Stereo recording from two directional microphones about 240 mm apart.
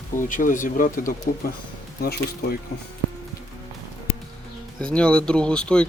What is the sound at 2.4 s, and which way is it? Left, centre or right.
Speech, left.